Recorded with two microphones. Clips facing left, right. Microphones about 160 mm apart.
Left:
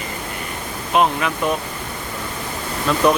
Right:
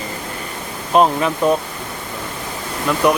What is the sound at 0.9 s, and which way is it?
Speech, 35° right (ahead or behind).